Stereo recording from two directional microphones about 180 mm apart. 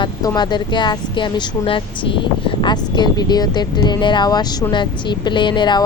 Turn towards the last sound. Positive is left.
turn(degrees=25)  # may be behind; listen again after turning